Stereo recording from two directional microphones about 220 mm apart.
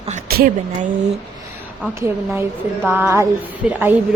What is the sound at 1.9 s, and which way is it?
A woman's voice, 10° right (ahead or behind).